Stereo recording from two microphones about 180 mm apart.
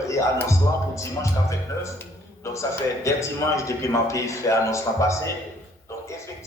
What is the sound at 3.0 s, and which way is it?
A man's voice, 15° left (ahead or behind).